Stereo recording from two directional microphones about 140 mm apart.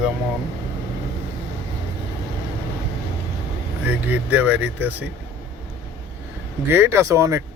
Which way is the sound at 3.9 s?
10° right (ahead or behind).